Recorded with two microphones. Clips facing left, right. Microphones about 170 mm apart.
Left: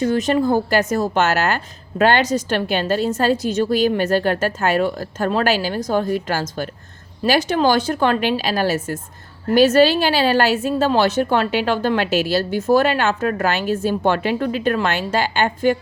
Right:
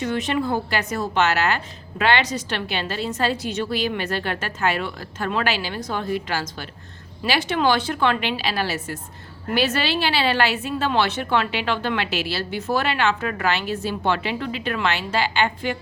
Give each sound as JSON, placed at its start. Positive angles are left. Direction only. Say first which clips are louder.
{"t": 0.0, "sound": "a woman's voice", "louder": "left 6 dB", "side_deg": 40}